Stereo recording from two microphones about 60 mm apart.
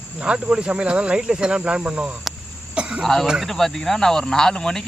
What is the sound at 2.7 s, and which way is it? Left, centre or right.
Cough, centre.